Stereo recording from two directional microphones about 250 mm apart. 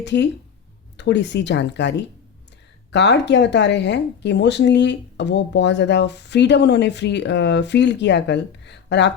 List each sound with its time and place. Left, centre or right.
0.0 s speech: left